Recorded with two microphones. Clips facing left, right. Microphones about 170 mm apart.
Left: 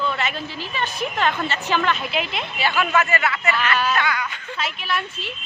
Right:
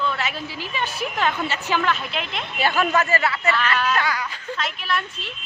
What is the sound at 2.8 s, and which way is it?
Speech, 35° right (ahead or behind).